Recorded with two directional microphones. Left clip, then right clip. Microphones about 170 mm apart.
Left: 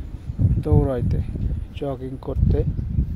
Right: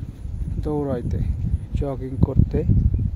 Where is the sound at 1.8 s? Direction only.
15° right (ahead or behind).